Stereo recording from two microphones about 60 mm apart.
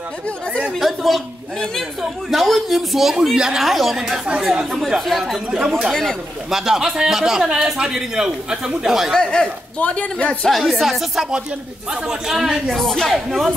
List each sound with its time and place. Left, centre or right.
0.7 s a woman's voice: centre
4.7 s a man's voice: centre
9.1 s speech: centre
9.8 s speech: centre
10.5 s a man's voice: centre
12.6 s a man's voice: centre